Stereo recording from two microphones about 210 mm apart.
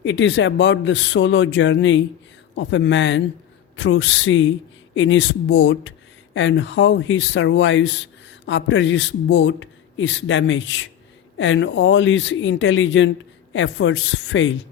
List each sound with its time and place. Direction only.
0.0 s speech: 60° left (ahead or behind)